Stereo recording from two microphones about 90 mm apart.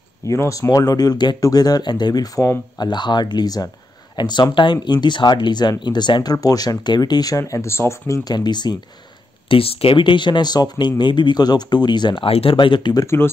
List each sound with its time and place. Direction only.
0.3 s speech: 35° left (ahead or behind)
2.8 s speech: 55° left (ahead or behind)
4.2 s speech: 55° left (ahead or behind)
6.3 s speech: 45° left (ahead or behind)
8.2 s speech: 50° left (ahead or behind)
9.5 s speech: 90° left; by 13.0 s 60° left (ahead or behind)
13.0 s speech: 30° left (ahead or behind)